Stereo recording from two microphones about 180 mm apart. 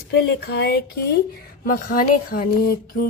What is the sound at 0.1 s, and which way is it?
A woman's voice, 65° left (ahead or behind).